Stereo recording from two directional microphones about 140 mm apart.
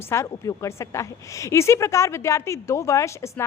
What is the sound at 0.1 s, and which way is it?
Speech, 20° left (ahead or behind).